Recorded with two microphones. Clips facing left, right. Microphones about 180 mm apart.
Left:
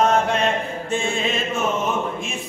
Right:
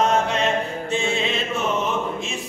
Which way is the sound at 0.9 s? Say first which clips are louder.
Left 1 dB; 50° left (ahead or behind).